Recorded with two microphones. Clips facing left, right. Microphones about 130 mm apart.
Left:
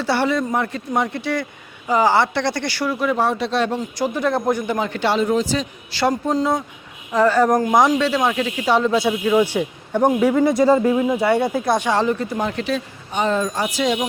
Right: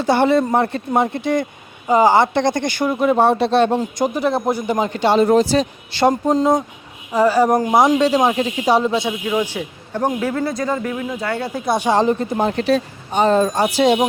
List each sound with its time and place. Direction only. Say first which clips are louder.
0.0 s speech: right 5 dB; 20° right (ahead or behind)
5.1 s speech: right 6 dB; 50° right (ahead or behind)
5.4 s speech: right 6 dB; 70° right (ahead or behind)
6.0 s speech: right 4 dB; 20° right (ahead or behind)
7.1 s speech: right 1 dB; 10° right (ahead or behind)
8.9 s speech: left 3 dB; 5° left (ahead or behind)
9.5 s a man's voice: left 5 dB; 15° left (ahead or behind)
10.6 s speech: left 7 dB; 25° left (ahead or behind)
11.9 s speech: right 3 dB; 20° right (ahead or behind)